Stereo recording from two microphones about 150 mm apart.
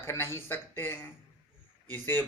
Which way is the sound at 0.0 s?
15° left (ahead or behind).